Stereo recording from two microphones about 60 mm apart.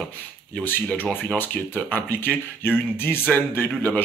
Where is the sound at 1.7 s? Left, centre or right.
Left.